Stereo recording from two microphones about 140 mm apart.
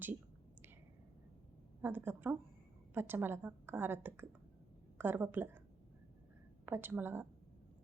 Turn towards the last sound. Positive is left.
turn(degrees=-15)  # may be behind; listen again after turning